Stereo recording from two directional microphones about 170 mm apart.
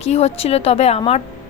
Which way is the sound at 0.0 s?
40° left (ahead or behind).